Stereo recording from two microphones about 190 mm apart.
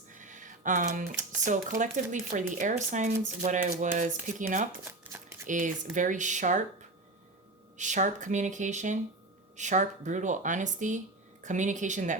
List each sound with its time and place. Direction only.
0.1 s a sound: 40° right (ahead or behind)
1.5 s speech: 45° right (ahead or behind)
4.9 s shuffling cards: 10° right (ahead or behind)
5.5 s speech: 40° right (ahead or behind)
7.8 s speech: 40° right (ahead or behind)